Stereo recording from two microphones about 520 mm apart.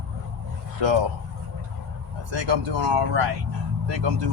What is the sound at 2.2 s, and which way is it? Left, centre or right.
Speech, right.